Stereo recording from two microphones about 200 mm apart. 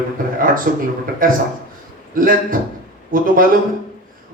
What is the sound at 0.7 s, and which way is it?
A man's voice, 50° right (ahead or behind).